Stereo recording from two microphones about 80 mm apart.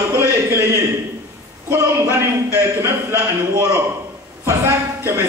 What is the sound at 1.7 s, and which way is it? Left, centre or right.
A man's voice, right.